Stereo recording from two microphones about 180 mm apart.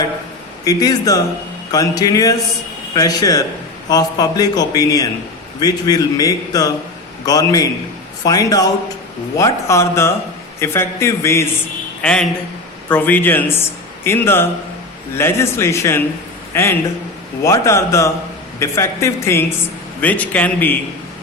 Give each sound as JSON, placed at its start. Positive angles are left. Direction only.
{"t": 0.6, "sound": "a man's voice", "side_deg": 20}